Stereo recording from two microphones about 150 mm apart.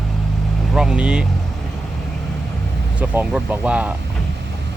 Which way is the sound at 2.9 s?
10° right (ahead or behind).